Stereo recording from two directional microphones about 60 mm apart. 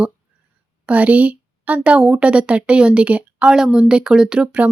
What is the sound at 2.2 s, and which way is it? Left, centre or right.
A woman's voice, centre.